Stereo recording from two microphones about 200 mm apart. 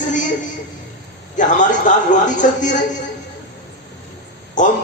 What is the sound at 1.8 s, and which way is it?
Speech, 40° left (ahead or behind).